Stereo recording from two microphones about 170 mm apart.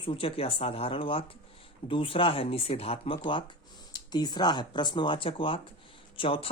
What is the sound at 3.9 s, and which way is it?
Speech, 25° left (ahead or behind).